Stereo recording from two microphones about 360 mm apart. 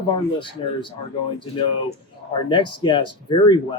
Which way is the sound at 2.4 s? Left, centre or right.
Centre.